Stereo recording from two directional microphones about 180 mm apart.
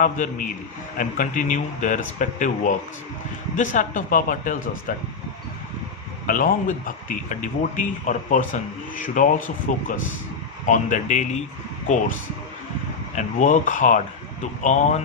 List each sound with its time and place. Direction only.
0.0 s speech: 45° left (ahead or behind)
6.2 s speech: 50° left (ahead or behind)
13.1 s speech: 45° left (ahead or behind)